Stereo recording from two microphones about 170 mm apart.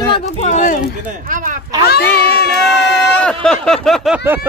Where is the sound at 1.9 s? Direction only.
70° left (ahead or behind).